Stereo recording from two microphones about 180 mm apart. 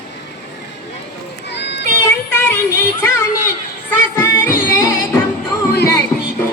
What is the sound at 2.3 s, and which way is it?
Speech, 15° left (ahead or behind).